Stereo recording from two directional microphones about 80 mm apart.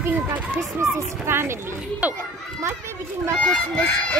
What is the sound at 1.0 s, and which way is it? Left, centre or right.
Speech, right.